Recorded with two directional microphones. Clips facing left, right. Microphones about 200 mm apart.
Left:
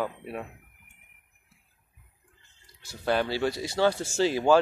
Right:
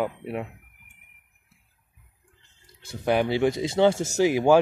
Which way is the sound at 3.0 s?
20° right (ahead or behind).